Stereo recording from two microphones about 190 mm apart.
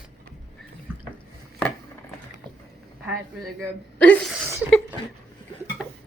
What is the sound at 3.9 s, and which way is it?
Speech, 10° left (ahead or behind).